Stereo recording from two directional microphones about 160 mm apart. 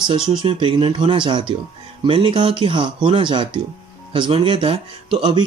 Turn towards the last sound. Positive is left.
turn(degrees=-30)  # may be behind; listen again after turning